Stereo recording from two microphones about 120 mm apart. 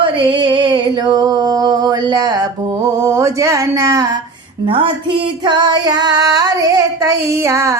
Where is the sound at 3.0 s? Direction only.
25° right (ahead or behind).